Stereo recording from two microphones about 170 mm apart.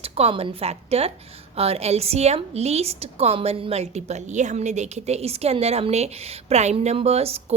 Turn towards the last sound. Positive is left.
turn(degrees=-35)  # may be behind; listen again after turning